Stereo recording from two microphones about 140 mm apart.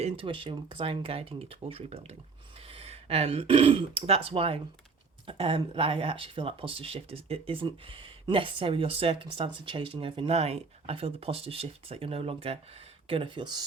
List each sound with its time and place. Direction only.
0.0 s speech: 40° right (ahead or behind)